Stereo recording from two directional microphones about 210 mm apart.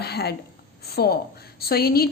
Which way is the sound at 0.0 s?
50° left (ahead or behind).